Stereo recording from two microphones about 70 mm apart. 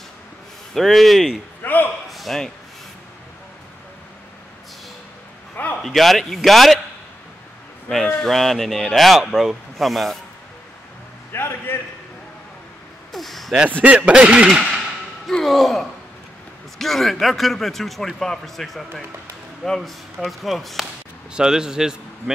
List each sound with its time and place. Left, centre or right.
0.7 s a man's voice: centre
1.6 s a man's voice: left
2.0 s a sound: centre
5.8 s a man's voice: centre
8.2 s a man's voice: centre
11.3 s a man's voice: left
13.1 s a sound: centre
13.7 s speech: right
14.5 s a man's voice: centre